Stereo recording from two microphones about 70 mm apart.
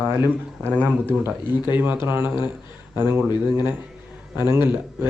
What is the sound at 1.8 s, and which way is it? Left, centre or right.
Speech, right.